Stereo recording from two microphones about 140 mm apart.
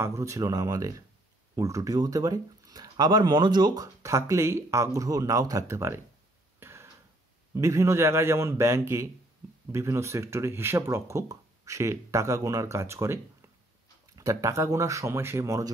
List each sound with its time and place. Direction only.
0.0 s speech: 20° right (ahead or behind)
6.6 s a sound: 20° right (ahead or behind)
7.5 s speech: 20° right (ahead or behind)